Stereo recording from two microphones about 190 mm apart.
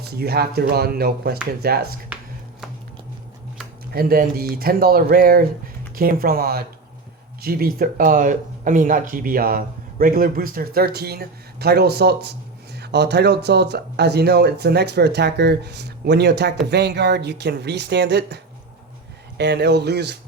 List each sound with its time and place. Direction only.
0.0 s speech: 55° right (ahead or behind)
3.9 s speech: 55° right (ahead or behind)
19.4 s speech: 60° right (ahead or behind)